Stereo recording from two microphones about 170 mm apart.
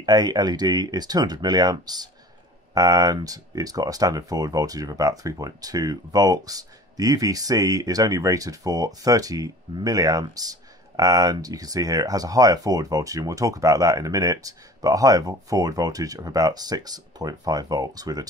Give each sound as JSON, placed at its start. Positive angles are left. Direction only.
{"t": 0.0, "sound": "speech", "side_deg": -25}